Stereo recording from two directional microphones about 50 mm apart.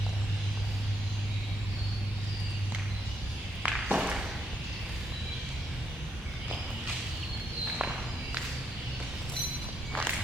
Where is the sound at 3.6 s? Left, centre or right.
Right.